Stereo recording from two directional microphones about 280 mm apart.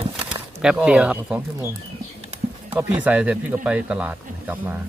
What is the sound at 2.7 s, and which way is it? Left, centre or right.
Speech, centre.